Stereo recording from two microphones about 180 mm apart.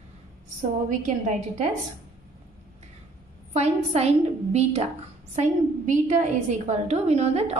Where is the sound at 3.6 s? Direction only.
35° right (ahead or behind).